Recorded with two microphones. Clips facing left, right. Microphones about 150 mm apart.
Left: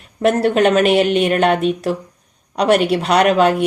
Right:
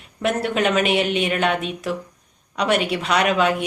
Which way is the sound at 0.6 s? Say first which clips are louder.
Left 5 dB; 40° left (ahead or behind).